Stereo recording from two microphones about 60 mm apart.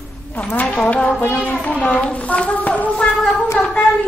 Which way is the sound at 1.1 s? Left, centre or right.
Left.